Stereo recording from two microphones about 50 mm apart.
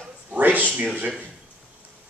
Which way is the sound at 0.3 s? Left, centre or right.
Right.